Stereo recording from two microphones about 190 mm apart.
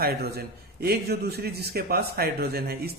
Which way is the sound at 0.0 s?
55° right (ahead or behind).